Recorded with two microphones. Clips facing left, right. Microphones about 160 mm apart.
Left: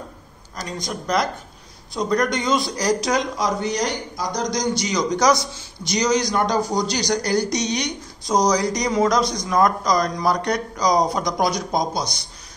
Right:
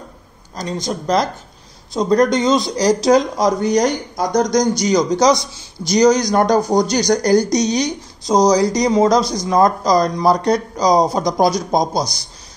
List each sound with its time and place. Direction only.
0.7 s speech: 25° right (ahead or behind)
5.2 s a man's voice: 20° right (ahead or behind)
5.9 s speech: 40° right (ahead or behind)